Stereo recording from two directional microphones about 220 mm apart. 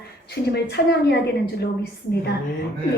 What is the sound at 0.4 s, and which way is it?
Speech, 50° left (ahead or behind).